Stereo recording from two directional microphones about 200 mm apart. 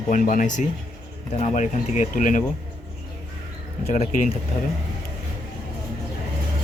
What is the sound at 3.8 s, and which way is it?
Speech, 35° left (ahead or behind).